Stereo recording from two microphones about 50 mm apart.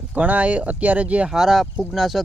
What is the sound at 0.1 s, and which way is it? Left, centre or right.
Speech, right.